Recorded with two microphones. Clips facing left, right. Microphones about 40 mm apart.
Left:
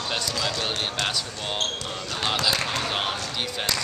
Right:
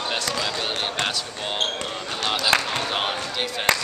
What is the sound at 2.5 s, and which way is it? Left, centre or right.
Speech, right.